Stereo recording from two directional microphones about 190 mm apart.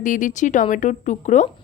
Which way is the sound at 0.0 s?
45° left (ahead or behind).